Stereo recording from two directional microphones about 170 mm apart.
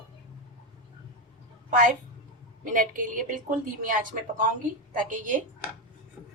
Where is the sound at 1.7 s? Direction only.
50° right (ahead or behind).